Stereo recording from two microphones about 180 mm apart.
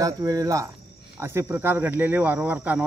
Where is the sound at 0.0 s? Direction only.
20° right (ahead or behind).